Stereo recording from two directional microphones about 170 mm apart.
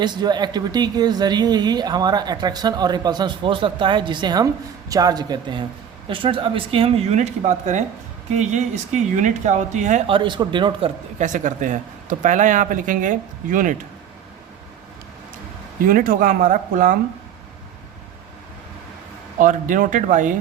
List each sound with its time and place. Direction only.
0.0 s speech: 25° right (ahead or behind); by 10.0 s 45° right (ahead or behind)
10.1 s speech: 30° right (ahead or behind)
11.3 s speech: 50° right (ahead or behind)
15.8 s speech: 55° right (ahead or behind)
19.4 s speech: 50° right (ahead or behind)